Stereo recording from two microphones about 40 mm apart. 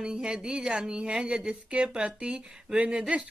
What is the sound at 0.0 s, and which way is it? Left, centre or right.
Speech, centre.